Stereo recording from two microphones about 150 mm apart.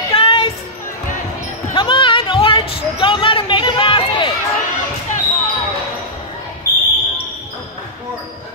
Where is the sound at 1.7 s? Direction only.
35° left (ahead or behind).